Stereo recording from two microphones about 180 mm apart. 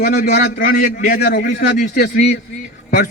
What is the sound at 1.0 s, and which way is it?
A man's voice, 55° left (ahead or behind).